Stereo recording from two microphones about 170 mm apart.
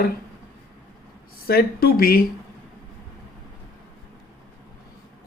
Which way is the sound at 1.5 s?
60° left (ahead or behind).